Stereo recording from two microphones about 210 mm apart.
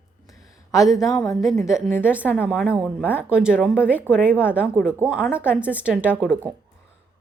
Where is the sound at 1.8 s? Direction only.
10° left (ahead or behind).